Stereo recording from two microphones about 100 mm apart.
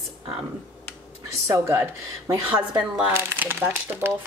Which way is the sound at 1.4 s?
30° right (ahead or behind).